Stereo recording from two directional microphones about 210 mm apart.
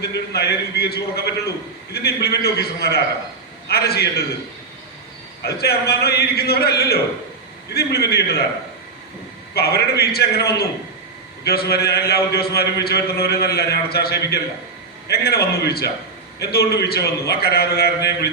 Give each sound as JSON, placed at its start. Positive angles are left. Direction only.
{"t": 0.0, "sound": "a man's voice", "side_deg": 50}
{"t": 5.4, "sound": "a man's voice", "side_deg": 50}
{"t": 9.6, "sound": "a man's voice", "side_deg": 50}